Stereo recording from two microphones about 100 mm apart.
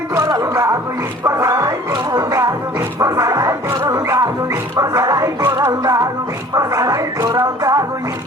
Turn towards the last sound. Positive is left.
turn(degrees=-35)  # may be behind; listen again after turning